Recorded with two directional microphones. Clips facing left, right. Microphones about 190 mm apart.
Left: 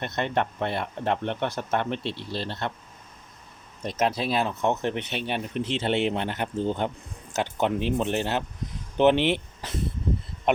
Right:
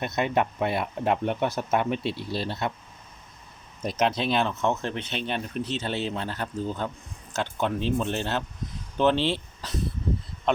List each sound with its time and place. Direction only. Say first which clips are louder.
0.0 s speech: right 2 dB; 10° right (ahead or behind)
3.9 s speech: even; 5° left (ahead or behind)
4.6 s speech: left 1 dB; 20° left (ahead or behind)